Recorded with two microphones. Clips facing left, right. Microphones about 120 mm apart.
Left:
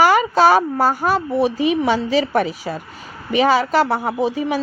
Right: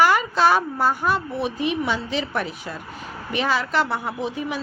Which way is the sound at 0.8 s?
40° left (ahead or behind).